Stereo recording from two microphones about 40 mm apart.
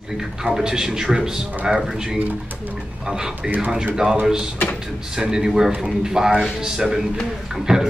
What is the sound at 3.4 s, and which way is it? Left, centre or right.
Speech, right.